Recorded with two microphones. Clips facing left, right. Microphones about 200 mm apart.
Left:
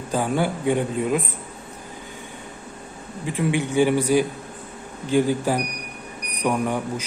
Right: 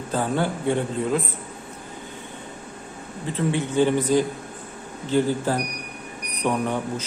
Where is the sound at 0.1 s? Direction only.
10° left (ahead or behind).